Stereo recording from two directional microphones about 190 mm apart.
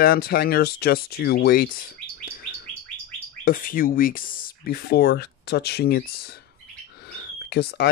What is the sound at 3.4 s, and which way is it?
Speech, 50° left (ahead or behind).